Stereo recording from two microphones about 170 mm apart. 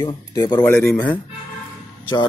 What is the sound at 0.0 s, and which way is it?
Speech, 25° left (ahead or behind).